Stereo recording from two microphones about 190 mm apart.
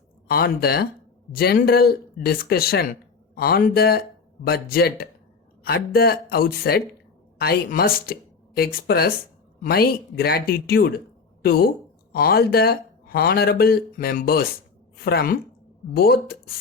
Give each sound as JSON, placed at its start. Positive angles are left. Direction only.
{"t": 0.3, "sound": "speech", "side_deg": 55}